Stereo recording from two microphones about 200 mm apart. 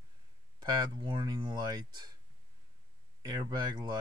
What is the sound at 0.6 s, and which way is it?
Speech, 20° right (ahead or behind).